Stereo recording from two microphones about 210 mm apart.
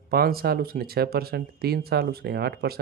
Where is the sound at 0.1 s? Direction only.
45° right (ahead or behind).